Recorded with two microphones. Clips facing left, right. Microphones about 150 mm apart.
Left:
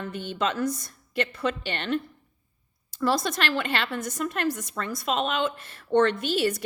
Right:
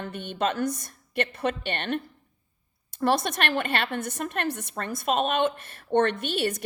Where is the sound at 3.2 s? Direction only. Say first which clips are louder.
Even; 60° right (ahead or behind).